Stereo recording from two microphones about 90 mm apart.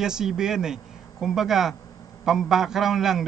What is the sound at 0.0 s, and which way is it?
A man's voice, 5° right (ahead or behind).